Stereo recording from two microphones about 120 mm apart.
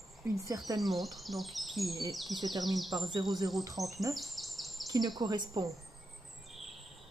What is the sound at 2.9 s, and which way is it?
Speech, 40° right (ahead or behind).